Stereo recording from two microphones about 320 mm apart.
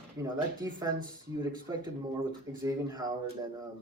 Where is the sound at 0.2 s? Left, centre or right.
Centre.